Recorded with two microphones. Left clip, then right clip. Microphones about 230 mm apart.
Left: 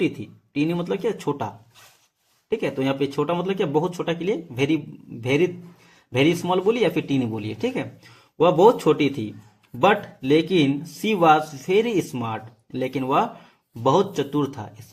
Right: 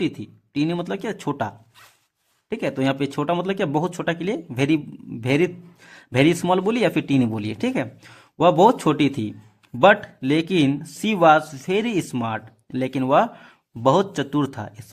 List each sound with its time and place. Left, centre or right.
0.0 s speech: right